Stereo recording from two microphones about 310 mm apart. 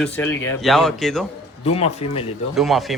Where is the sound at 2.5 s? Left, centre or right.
Centre.